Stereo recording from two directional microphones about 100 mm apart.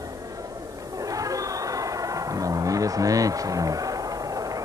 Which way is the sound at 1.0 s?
35° right (ahead or behind).